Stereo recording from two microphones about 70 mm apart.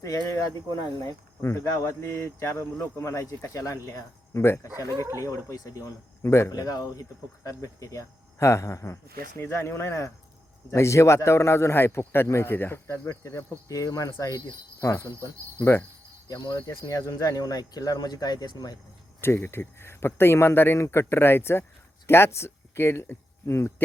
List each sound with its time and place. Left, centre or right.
0.5 s speech: left
1.4 s a man's voice: left
5.1 s speech: left
6.2 s a man's voice: left
6.5 s a man's voice: left
13.7 s speech: left
14.8 s cricket: left
16.3 s speech: left
16.6 s speech: left
19.2 s a man's voice: left